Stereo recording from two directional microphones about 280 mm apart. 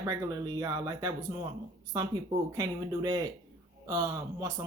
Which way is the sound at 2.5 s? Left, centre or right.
Centre.